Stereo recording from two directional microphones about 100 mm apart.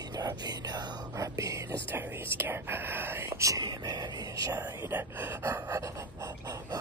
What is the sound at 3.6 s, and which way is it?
Speech, 45° right (ahead or behind).